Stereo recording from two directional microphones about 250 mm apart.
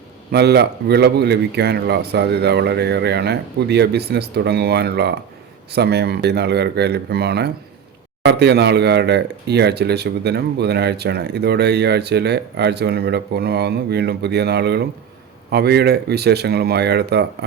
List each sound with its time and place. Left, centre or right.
0.3 s speech: right